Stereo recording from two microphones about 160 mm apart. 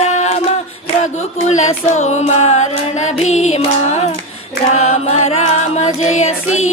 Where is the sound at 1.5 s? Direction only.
45° left (ahead or behind).